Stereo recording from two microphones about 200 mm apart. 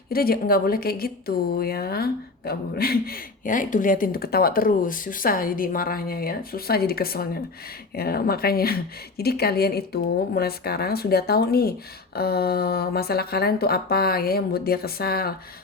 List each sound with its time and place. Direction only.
0.1 s speech: 50° left (ahead or behind)